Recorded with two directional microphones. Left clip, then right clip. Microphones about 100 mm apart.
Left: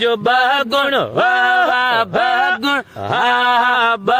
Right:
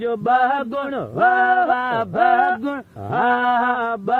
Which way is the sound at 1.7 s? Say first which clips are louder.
Left 5 dB; 5° right (ahead or behind).